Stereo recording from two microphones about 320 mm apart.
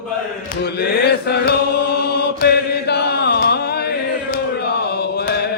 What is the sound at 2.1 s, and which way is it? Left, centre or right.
Chant, left.